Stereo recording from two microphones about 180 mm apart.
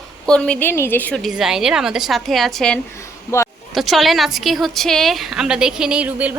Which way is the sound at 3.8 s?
Centre (ahead or behind).